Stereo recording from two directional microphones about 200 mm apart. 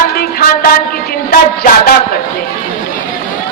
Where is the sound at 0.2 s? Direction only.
50° left (ahead or behind).